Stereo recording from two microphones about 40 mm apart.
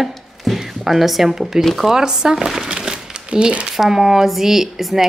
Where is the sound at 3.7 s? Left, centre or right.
Centre.